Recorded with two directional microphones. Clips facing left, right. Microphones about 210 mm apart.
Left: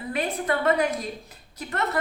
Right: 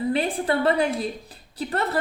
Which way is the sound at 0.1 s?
30° right (ahead or behind).